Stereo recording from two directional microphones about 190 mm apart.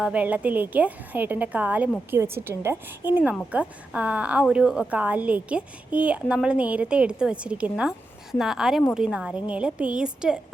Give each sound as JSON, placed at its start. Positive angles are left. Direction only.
{"t": 0.0, "sound": "a woman's voice", "side_deg": -5}